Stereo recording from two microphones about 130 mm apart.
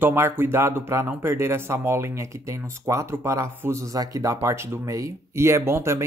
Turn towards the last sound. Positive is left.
turn(degrees=-20)  # may be behind; listen again after turning